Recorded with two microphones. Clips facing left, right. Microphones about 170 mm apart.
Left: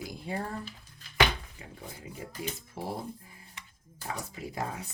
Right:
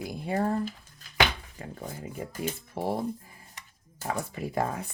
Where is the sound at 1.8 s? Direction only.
45° right (ahead or behind).